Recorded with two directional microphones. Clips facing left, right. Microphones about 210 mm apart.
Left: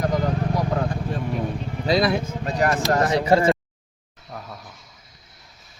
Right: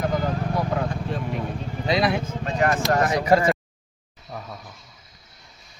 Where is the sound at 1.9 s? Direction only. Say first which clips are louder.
Left 2 dB; 35° left (ahead or behind).